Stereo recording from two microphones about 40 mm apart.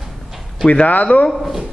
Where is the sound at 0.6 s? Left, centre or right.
Left.